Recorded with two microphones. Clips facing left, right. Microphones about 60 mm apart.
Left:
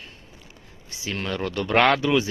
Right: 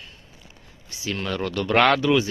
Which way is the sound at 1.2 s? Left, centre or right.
Centre.